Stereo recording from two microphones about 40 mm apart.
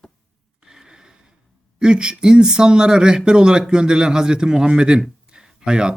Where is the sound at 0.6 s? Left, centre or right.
Centre.